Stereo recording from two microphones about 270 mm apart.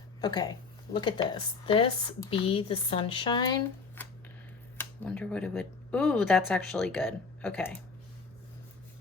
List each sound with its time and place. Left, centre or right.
0.2 s speech: centre
4.8 s speech: centre